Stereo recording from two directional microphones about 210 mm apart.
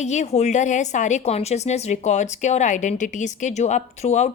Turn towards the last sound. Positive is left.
turn(degrees=35)  # may be behind; listen again after turning